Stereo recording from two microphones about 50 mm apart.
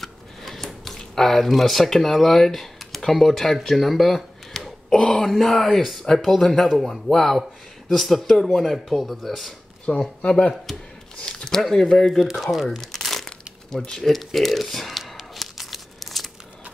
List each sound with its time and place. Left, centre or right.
0.0 s scissors: centre
0.9 s speech: centre
9.9 s speech: left
10.7 s speech: centre
11.1 s a sound: centre
11.6 s speech: centre
12.2 s crumpling: centre